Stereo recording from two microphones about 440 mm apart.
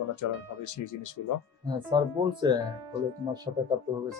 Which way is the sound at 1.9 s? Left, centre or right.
Centre.